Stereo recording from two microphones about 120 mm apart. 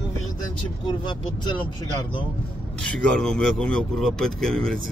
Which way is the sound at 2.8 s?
5° left (ahead or behind).